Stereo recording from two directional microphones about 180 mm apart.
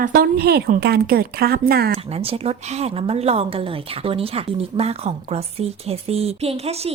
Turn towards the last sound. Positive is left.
turn(degrees=-35)  # may be behind; listen again after turning